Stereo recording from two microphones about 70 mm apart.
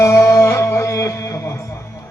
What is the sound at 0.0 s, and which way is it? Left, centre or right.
Music, left.